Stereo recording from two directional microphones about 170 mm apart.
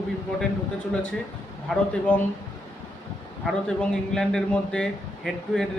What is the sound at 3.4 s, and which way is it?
A man's voice, 5° left (ahead or behind).